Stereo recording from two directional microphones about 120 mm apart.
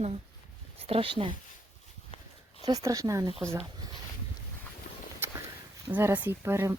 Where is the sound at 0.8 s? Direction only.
50° right (ahead or behind).